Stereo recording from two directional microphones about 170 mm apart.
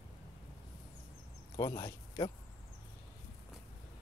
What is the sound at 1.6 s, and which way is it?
Speech, 20° left (ahead or behind).